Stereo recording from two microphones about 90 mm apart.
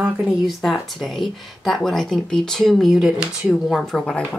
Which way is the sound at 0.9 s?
Centre (ahead or behind).